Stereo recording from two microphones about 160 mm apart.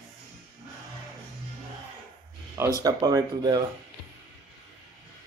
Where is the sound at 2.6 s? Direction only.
20° right (ahead or behind).